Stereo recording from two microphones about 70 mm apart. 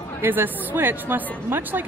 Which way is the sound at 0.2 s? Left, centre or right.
Right.